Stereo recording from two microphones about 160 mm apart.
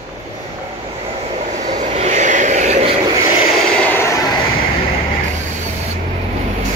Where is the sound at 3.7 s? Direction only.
10° left (ahead or behind).